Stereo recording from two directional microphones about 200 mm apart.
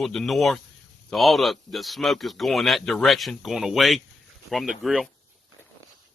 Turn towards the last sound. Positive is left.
turn(degrees=0)  # may be behind; listen again after turning